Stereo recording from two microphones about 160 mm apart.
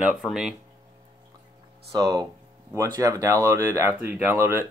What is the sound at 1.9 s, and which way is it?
Speech, 25° right (ahead or behind).